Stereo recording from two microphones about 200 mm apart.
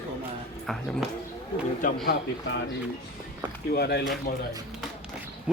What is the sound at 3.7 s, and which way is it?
Speech, 50° left (ahead or behind).